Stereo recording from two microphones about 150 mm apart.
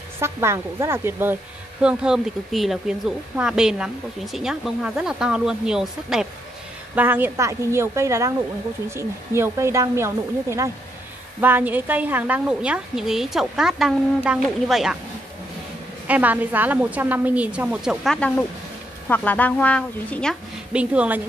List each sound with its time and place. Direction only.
0.2 s a woman's voice: 15° right (ahead or behind)
1.8 s a woman's voice: 5° right (ahead or behind)
16.1 s a woman's voice: 10° right (ahead or behind)
18.0 s speech: 5° left (ahead or behind)
20.7 s a woman's voice: 10° right (ahead or behind)